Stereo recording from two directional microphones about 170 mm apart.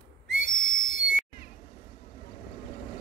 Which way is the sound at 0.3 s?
90° right.